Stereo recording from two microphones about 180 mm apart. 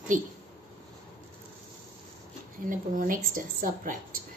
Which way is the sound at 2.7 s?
50° right (ahead or behind).